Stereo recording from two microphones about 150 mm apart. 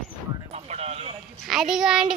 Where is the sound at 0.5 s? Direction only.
45° right (ahead or behind).